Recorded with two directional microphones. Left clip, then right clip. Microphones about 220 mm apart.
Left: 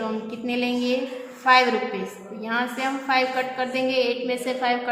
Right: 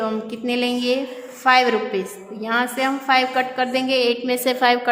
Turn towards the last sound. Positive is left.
turn(degrees=-50)  # may be behind; listen again after turning